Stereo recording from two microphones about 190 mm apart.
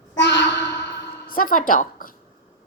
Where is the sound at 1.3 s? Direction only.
50° left (ahead or behind).